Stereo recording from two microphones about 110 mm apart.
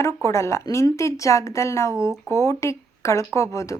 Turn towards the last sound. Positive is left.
turn(degrees=30)  # may be behind; listen again after turning